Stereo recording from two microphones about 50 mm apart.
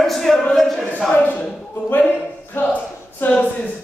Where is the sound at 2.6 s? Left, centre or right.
Left.